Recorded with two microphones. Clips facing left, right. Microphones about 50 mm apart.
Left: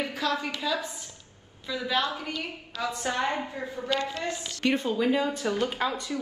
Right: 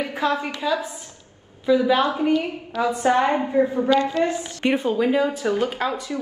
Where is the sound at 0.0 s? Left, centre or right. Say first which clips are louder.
Right 6 dB; right.